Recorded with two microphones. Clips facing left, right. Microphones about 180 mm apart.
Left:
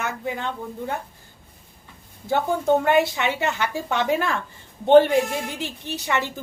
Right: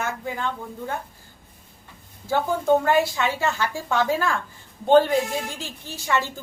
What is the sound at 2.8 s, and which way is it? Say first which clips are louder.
Speech: left 1 dB; 20° left (ahead or behind).